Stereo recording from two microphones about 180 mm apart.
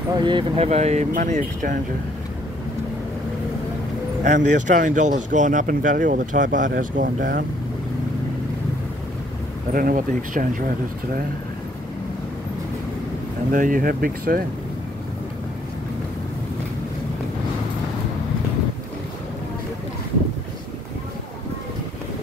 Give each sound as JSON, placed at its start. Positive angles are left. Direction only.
{"t": 0.2, "sound": "speech", "side_deg": -25}
{"t": 4.2, "sound": "speech", "side_deg": -45}
{"t": 9.8, "sound": "speech", "side_deg": -50}
{"t": 13.5, "sound": "speech", "side_deg": -50}